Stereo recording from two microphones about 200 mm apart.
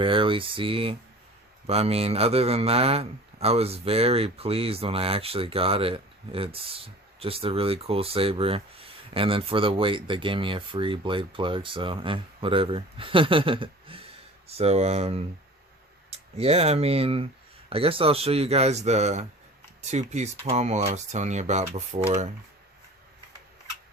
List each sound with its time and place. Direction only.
0.0 s speech: 25° right (ahead or behind)